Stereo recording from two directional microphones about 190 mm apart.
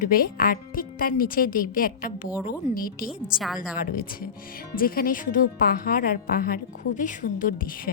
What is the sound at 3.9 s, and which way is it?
Speech, 50° left (ahead or behind).